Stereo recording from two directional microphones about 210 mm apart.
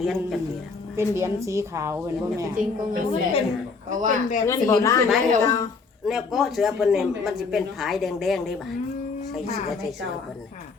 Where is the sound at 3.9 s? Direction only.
35° right (ahead or behind).